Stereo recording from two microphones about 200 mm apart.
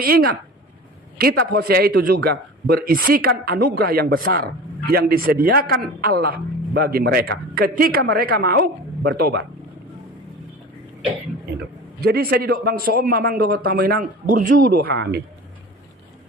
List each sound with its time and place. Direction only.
0.0 s a man's voice: 50° right (ahead or behind)
12.0 s a man's voice: 50° right (ahead or behind)